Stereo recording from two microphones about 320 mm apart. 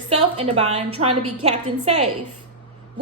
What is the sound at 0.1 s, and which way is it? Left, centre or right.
A woman's voice, centre.